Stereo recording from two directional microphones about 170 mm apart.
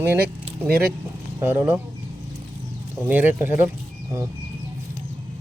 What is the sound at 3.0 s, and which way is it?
Speech, 10° right (ahead or behind).